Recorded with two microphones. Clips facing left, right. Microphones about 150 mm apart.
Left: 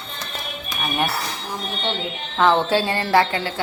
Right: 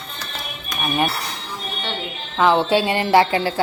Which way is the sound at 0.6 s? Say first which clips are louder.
Right 3 dB; centre (ahead or behind).